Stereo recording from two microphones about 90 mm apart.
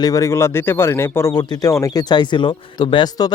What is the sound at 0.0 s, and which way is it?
Speech, 40° left (ahead or behind).